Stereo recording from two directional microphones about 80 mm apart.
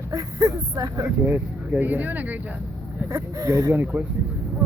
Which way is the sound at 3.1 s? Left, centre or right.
Right.